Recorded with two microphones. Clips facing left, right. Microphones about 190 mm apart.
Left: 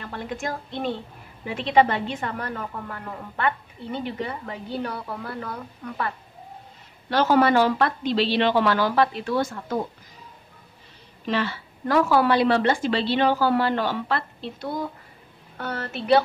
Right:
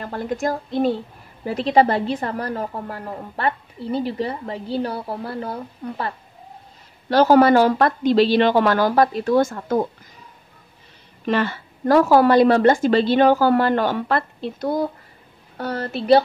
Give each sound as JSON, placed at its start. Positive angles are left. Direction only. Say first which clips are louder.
{"t": 0.0, "sound": "a woman's voice", "louder": "right 7 dB", "side_deg": -40}
{"t": 11.2, "sound": "a woman's voice", "louder": "right 5 dB", "side_deg": -50}